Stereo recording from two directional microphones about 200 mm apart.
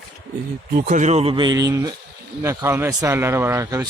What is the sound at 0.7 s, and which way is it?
A man's voice, 40° right (ahead or behind).